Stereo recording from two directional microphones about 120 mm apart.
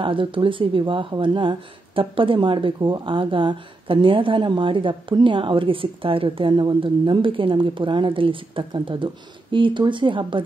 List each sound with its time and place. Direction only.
0.0 s speech: 45° right (ahead or behind)